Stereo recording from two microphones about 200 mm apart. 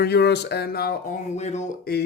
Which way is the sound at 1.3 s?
35° left (ahead or behind).